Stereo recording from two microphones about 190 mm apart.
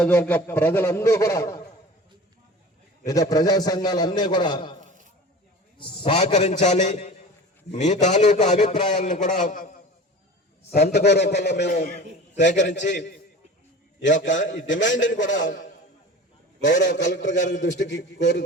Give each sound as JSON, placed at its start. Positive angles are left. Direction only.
{"t": 0.0, "sound": "a man's voice", "side_deg": 10}
{"t": 3.1, "sound": "a man's voice", "side_deg": 20}
{"t": 9.0, "sound": "a man's voice", "side_deg": 40}
{"t": 10.7, "sound": "a man's voice", "side_deg": 55}
{"t": 15.4, "sound": "a man's voice", "side_deg": 45}
{"t": 16.6, "sound": "a man's voice", "side_deg": 65}